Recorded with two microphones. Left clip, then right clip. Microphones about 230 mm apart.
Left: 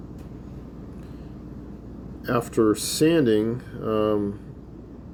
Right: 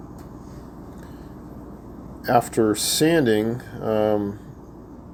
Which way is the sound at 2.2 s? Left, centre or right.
Centre.